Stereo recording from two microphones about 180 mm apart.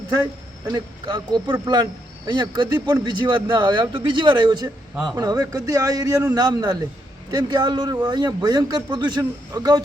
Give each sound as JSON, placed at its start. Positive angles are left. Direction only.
{"t": 0.7, "sound": "speech", "side_deg": -25}